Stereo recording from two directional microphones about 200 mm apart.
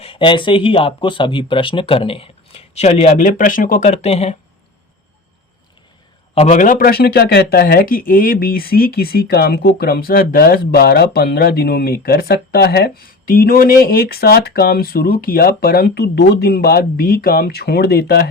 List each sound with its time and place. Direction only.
0.0 s speech: 25° left (ahead or behind)
6.3 s speech: 35° left (ahead or behind); by 18.3 s 55° left (ahead or behind)